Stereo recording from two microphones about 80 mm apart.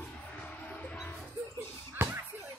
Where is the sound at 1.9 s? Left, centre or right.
Right.